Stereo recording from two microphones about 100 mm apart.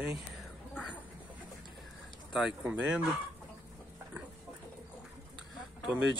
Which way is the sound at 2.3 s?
5° right (ahead or behind).